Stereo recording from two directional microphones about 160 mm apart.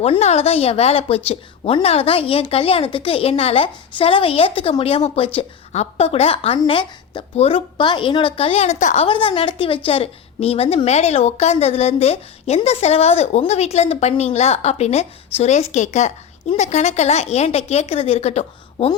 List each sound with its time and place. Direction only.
0.0 s a woman's voice: 40° left (ahead or behind)
9.0 s a woman's voice: 35° left (ahead or behind)